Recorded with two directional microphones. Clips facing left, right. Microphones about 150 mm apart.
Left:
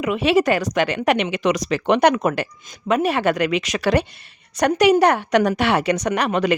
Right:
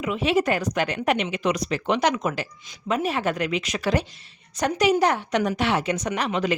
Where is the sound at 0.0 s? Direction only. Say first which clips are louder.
Left 5 dB; 75° left (ahead or behind).